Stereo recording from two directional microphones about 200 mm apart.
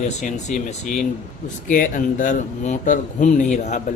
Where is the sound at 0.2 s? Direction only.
35° left (ahead or behind).